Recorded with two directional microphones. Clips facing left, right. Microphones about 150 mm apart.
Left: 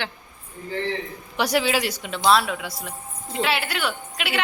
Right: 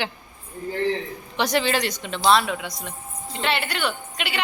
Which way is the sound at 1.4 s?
5° left (ahead or behind).